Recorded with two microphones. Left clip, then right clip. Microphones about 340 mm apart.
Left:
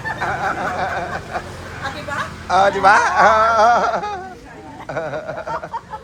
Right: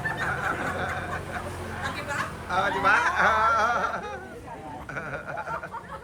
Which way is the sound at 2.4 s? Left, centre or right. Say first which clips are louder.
Left 11 dB; centre.